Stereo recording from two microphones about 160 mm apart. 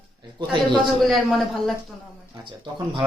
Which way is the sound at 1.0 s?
Centre (ahead or behind).